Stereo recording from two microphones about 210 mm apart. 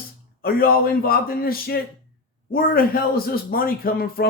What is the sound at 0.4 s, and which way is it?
Speech, 45° left (ahead or behind).